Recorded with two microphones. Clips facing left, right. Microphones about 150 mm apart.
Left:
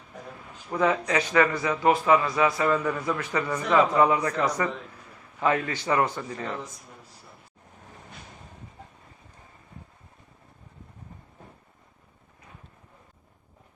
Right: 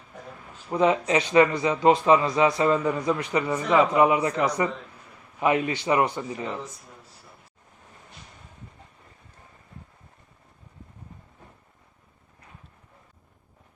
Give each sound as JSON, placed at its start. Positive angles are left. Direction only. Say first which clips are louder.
{"t": 0.7, "sound": "a man's voice", "louder": "right 3 dB", "side_deg": -20}